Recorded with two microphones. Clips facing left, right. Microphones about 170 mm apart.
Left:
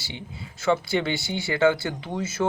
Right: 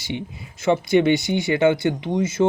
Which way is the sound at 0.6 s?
20° right (ahead or behind).